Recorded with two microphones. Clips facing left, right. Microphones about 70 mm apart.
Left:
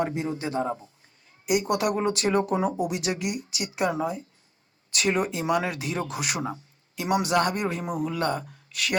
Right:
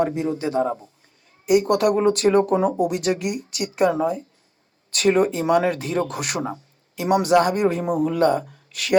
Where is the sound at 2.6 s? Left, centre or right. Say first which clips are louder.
Right 5 dB; right.